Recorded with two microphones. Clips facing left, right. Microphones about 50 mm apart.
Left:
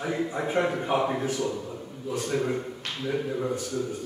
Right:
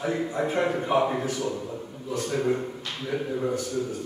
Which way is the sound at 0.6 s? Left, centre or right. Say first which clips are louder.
Right 3 dB; centre.